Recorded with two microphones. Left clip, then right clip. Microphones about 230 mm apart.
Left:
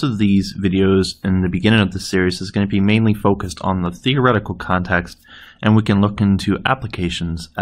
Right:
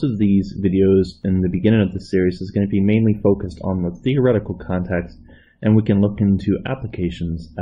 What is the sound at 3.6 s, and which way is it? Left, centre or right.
Speech, left.